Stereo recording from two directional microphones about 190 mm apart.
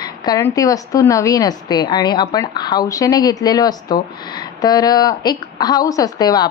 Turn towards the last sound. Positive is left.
turn(degrees=20)  # may be behind; listen again after turning